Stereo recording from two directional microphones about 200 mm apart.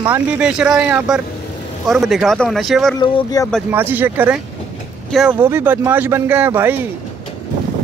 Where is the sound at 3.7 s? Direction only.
10° right (ahead or behind).